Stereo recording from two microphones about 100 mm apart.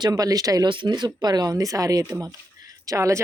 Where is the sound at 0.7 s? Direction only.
50° right (ahead or behind).